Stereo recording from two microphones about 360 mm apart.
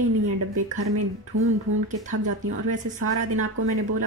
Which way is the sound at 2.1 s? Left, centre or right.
Right.